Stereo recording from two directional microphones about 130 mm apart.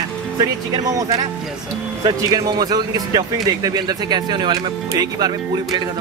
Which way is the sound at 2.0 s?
30° right (ahead or behind).